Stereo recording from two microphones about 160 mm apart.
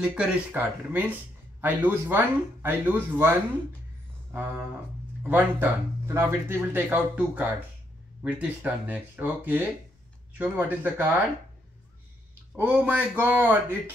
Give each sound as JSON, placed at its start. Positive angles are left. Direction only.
{"t": 0.0, "sound": "speech", "side_deg": -5}
{"t": 4.3, "sound": "a sound", "side_deg": -10}
{"t": 5.2, "sound": "speech", "side_deg": -10}
{"t": 12.5, "sound": "speech", "side_deg": -10}